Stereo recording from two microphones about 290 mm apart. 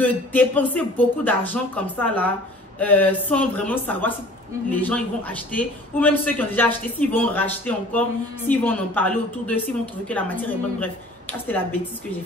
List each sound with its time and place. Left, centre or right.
0.0 s a man's voice: centre